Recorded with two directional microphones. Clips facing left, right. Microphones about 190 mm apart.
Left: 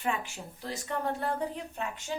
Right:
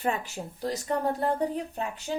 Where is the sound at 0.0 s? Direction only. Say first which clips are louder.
Right 3 dB; 40° right (ahead or behind).